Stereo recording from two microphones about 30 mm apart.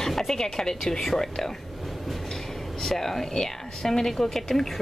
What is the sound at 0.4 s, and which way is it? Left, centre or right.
A woman's voice, centre.